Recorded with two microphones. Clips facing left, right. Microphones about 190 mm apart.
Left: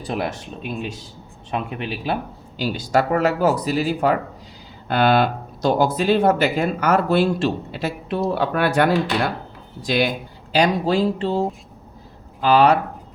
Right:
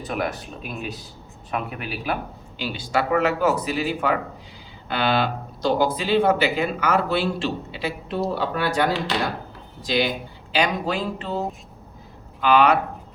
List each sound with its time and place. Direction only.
0.1 s speech: 30° left (ahead or behind)
2.6 s speech: 40° left (ahead or behind)
8.4 s speech: 60° left (ahead or behind)
10.5 s speech: 35° left (ahead or behind)